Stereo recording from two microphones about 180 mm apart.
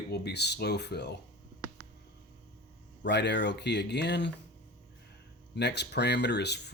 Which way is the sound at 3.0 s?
70° left (ahead or behind).